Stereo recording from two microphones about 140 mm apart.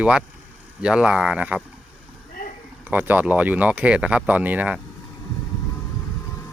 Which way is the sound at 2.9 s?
10° right (ahead or behind).